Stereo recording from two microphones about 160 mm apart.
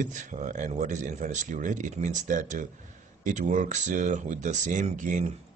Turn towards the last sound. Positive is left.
turn(degrees=-50)  # may be behind; listen again after turning